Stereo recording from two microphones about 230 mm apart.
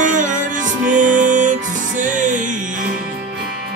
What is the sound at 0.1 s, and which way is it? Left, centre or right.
Music, right.